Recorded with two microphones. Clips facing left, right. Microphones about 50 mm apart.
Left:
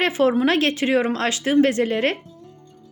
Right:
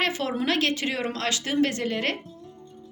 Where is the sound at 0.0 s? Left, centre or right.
Left.